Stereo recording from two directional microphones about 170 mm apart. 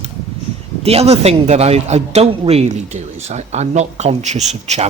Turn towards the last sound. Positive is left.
turn(degrees=-40)  # may be behind; listen again after turning